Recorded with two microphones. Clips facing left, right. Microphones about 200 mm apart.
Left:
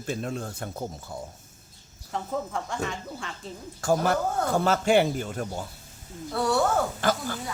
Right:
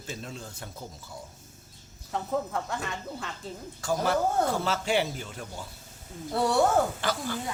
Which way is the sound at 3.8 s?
50° left (ahead or behind).